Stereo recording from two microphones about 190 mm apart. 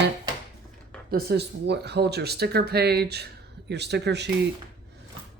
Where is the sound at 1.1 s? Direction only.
60° right (ahead or behind).